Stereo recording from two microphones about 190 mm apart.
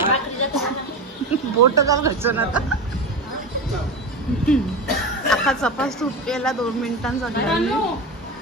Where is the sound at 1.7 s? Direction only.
15° right (ahead or behind).